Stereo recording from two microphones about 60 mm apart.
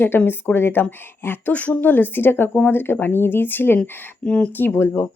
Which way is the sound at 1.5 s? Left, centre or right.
Left.